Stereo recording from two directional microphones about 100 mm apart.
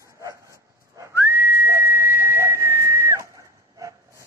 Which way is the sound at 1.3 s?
25° right (ahead or behind).